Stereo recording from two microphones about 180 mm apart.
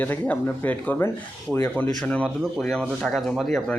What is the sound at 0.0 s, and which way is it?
Speech, 10° left (ahead or behind).